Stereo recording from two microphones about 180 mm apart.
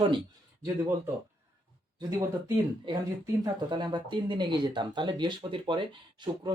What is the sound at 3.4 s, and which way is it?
Speech, 25° right (ahead or behind).